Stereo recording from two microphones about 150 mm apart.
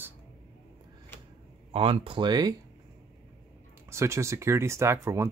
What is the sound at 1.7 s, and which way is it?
Speech, 40° right (ahead or behind).